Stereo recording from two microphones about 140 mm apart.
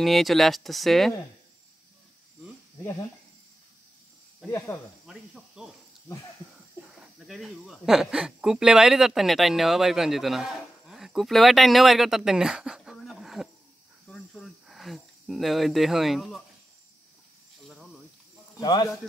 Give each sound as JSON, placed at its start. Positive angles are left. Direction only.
{"t": 0.0, "sound": "speech", "side_deg": 0}
{"t": 4.5, "sound": "speech", "side_deg": 20}
{"t": 5.0, "sound": "speech", "side_deg": -5}
{"t": 7.2, "sound": "speech", "side_deg": 0}
{"t": 14.0, "sound": "cricket", "side_deg": 5}
{"t": 18.6, "sound": "speech", "side_deg": 30}